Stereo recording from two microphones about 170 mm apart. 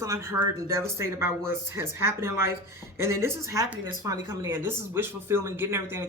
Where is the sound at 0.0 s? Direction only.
15° right (ahead or behind).